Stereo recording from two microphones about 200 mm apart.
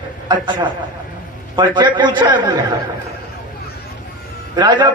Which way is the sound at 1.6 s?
25° right (ahead or behind).